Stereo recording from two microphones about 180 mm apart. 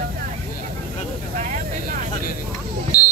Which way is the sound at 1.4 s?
45° right (ahead or behind).